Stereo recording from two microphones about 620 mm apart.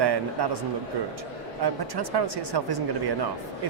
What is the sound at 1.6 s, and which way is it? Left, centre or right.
Speech, right.